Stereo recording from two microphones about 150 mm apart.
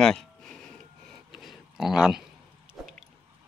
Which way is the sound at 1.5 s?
Centre (ahead or behind).